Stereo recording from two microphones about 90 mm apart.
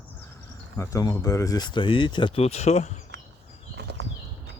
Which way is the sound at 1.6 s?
65° left (ahead or behind).